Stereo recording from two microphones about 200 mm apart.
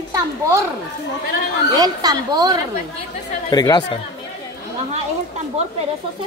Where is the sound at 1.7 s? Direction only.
20° right (ahead or behind).